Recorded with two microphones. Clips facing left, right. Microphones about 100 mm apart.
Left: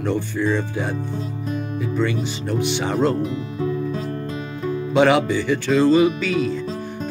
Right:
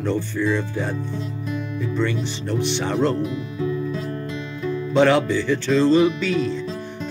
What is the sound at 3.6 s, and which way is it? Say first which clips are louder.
Music: left 1 dB; 40° left (ahead or behind).